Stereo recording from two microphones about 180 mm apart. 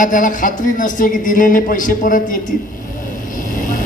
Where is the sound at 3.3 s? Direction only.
45° left (ahead or behind).